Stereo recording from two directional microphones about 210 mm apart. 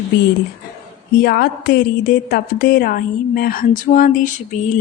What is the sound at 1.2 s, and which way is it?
A woman's voice, 50° left (ahead or behind).